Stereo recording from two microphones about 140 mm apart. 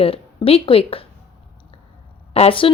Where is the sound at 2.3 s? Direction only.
40° left (ahead or behind).